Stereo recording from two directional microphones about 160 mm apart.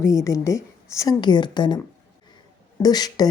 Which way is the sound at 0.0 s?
20° left (ahead or behind).